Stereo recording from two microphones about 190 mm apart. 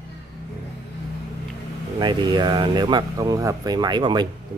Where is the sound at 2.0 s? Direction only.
25° right (ahead or behind).